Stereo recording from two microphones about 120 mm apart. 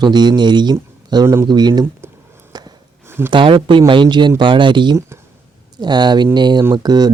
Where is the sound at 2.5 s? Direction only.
35° right (ahead or behind).